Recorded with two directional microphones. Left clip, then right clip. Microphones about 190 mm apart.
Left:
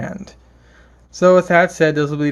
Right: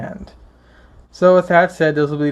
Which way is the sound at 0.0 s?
20° left (ahead or behind).